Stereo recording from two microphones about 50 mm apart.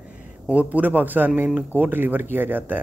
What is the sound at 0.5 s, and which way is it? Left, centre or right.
Speech, right.